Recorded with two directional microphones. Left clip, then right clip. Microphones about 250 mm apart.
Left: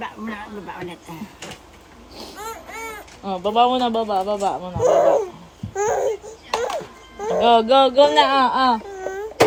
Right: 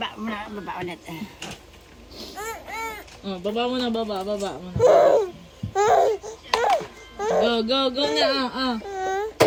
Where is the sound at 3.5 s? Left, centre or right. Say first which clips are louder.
Left 9 dB; right.